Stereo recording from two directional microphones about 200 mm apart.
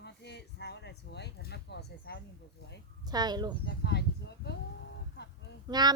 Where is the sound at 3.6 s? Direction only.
55° left (ahead or behind).